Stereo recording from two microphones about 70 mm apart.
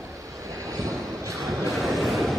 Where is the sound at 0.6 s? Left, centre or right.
Right.